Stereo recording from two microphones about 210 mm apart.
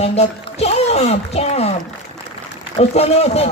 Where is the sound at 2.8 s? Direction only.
30° left (ahead or behind).